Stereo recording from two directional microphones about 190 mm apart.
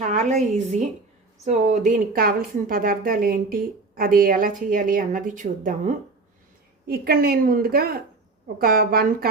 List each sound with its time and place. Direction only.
0.0 s a sound: 40° right (ahead or behind)
0.5 s a woman's voice: 40° right (ahead or behind)
6.8 s a woman's voice: 55° right (ahead or behind)